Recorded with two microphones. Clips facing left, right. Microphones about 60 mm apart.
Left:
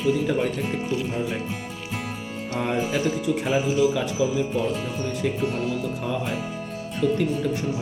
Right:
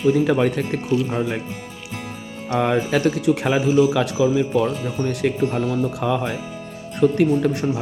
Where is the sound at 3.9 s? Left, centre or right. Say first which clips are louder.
Right 5 dB; right.